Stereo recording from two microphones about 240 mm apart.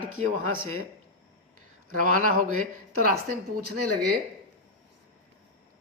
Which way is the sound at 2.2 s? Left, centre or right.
Right.